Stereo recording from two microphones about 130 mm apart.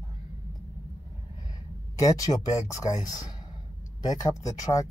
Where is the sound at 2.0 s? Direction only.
30° left (ahead or behind).